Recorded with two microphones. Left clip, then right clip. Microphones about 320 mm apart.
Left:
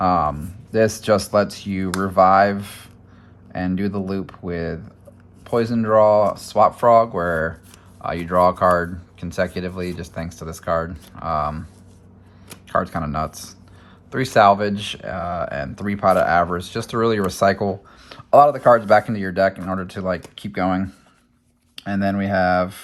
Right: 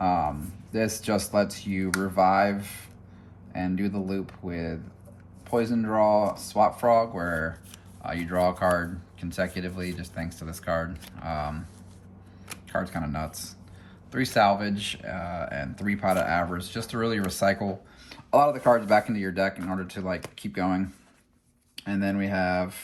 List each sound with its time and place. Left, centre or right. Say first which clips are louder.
0.0 s speech: left 7 dB; left
12.6 s speech: left 9 dB; centre